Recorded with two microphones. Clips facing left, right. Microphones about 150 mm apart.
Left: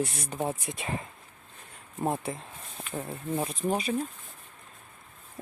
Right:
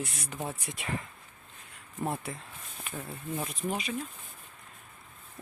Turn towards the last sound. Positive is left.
turn(degrees=35)  # may be behind; listen again after turning